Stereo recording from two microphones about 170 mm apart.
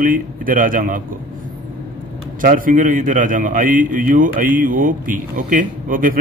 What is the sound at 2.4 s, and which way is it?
A man's voice, 55° right (ahead or behind).